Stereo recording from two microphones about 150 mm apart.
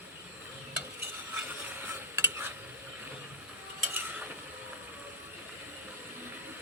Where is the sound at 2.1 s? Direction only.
15° right (ahead or behind).